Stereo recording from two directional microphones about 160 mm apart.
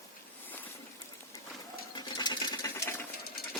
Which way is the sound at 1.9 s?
25° left (ahead or behind).